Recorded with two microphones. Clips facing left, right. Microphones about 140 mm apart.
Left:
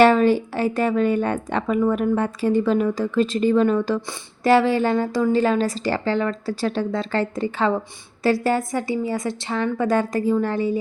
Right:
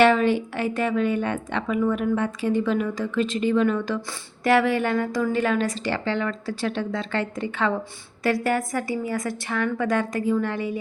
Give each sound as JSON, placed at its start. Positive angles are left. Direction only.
{"t": 0.0, "sound": "a woman's voice", "side_deg": 40}